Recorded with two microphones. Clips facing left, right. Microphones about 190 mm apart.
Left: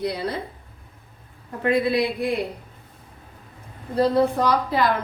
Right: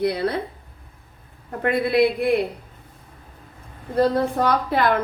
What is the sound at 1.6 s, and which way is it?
Speech, 60° right (ahead or behind).